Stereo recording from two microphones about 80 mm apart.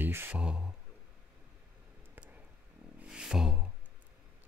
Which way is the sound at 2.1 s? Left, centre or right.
Right.